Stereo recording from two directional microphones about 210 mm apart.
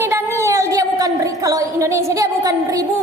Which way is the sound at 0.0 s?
15° right (ahead or behind).